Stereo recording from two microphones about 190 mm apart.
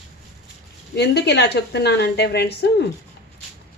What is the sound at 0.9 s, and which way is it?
Speech, 60° left (ahead or behind).